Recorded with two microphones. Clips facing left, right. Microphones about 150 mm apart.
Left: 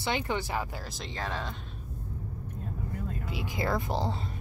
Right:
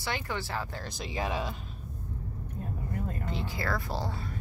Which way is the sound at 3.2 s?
15° left (ahead or behind).